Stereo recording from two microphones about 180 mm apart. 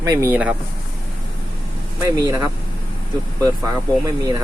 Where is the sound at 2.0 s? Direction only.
15° right (ahead or behind).